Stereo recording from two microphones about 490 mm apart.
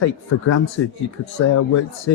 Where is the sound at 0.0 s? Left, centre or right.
Left.